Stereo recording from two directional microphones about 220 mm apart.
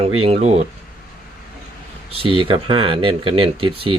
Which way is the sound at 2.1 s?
25° right (ahead or behind).